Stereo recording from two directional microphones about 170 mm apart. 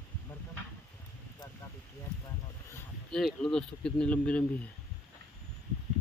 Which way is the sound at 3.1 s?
5° left (ahead or behind).